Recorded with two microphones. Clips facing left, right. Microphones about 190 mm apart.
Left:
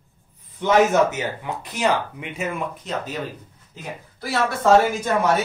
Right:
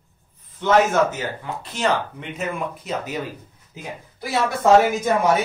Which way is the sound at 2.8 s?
10° right (ahead or behind).